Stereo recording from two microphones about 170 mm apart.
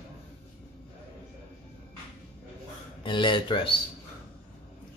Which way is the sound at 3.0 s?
30° left (ahead or behind).